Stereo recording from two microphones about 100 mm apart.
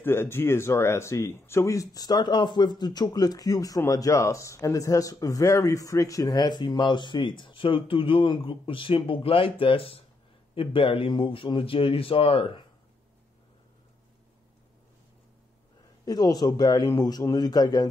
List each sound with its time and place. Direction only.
0.0 s a man's voice: 25° left (ahead or behind); by 12.6 s 70° left (ahead or behind)
16.1 s speech: 40° left (ahead or behind)